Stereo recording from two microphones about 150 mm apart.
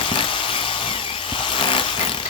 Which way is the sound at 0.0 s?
35° left (ahead or behind).